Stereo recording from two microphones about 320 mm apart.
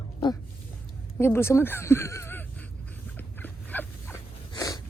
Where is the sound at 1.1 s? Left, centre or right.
Centre.